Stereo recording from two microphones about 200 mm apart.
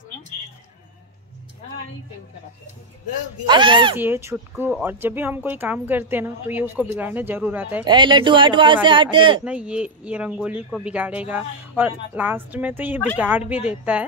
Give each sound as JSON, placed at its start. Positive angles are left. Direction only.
{"t": 3.4, "sound": "speech", "side_deg": -25}
{"t": 3.9, "sound": "speech", "side_deg": -10}
{"t": 7.8, "sound": "speech", "side_deg": -25}
{"t": 9.4, "sound": "speech", "side_deg": -5}